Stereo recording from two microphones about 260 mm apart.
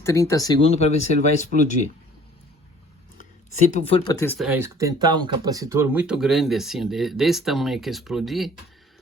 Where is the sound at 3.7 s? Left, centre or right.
Left.